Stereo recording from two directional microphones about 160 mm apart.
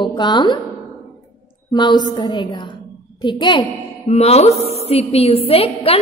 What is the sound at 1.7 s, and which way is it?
A woman's voice, 30° left (ahead or behind).